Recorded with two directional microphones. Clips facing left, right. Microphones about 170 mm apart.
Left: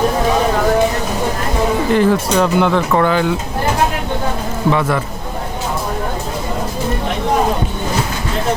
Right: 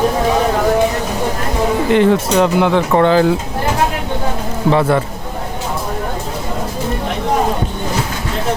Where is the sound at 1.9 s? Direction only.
25° right (ahead or behind).